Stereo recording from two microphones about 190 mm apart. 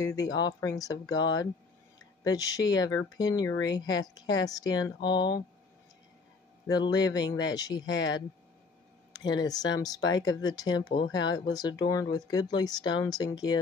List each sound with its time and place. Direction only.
0.0 s speech: 20° left (ahead or behind)
6.7 s speech: 20° left (ahead or behind)